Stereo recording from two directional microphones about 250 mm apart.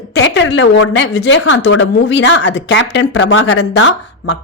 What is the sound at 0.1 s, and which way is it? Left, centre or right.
Speech, left.